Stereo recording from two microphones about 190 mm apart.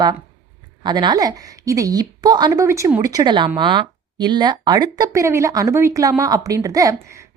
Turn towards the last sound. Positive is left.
turn(degrees=-15)  # may be behind; listen again after turning